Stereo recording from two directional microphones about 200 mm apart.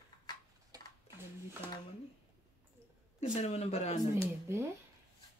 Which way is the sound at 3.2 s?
30° left (ahead or behind).